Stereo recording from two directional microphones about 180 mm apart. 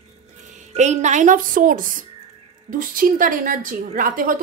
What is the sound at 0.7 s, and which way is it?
A woman's voice, 40° right (ahead or behind).